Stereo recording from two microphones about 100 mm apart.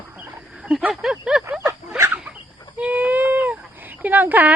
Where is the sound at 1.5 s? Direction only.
25° right (ahead or behind).